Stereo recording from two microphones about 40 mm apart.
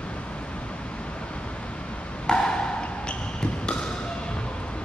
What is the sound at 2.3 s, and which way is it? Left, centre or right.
Basketball bounce, left.